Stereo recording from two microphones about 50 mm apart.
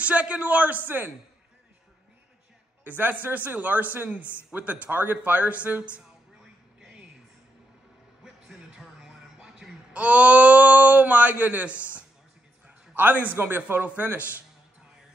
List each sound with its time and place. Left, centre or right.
0.0 s speech: right
0.8 s speech: right
2.8 s speech: right
8.2 s music: centre
10.0 s speech: right
12.9 s speech: right
13.8 s speech: right